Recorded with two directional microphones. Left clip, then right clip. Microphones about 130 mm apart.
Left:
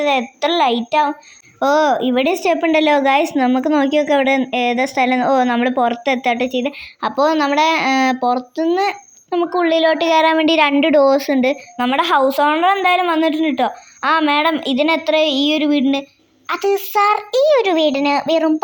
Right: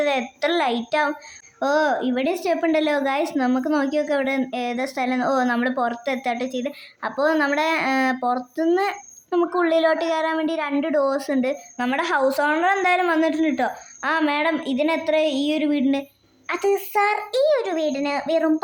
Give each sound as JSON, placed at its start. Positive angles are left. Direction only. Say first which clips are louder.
{"t": 0.0, "sound": "a woman's voice", "louder": "left 5 dB", "side_deg": 20}
{"t": 1.5, "sound": "speech", "louder": "left 6 dB", "side_deg": 25}